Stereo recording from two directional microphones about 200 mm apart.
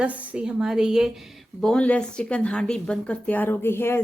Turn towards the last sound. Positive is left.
turn(degrees=10)  # may be behind; listen again after turning